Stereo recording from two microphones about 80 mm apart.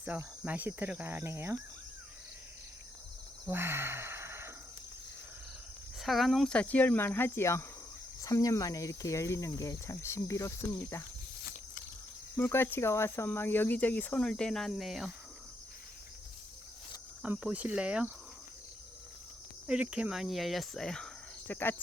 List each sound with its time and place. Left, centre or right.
0.4 s speech: right
3.5 s sigh: right
6.0 s speech: centre
6.5 s speech: centre; by 7.6 s left
8.2 s speech: left
10.8 s speech: left
12.4 s speech: left; by 15.1 s centre
17.3 s speech: centre
19.6 s speech: centre
21.5 s speech: left